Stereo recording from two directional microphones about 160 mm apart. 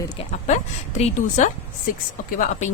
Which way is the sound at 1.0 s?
50° left (ahead or behind).